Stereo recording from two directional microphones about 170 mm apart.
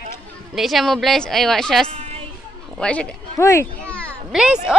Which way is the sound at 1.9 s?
35° right (ahead or behind).